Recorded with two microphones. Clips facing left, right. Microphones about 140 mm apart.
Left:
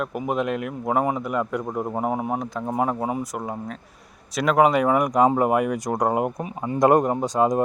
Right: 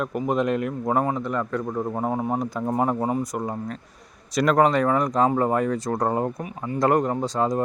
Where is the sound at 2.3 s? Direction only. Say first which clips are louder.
Right 1 dB; centre (ahead or behind).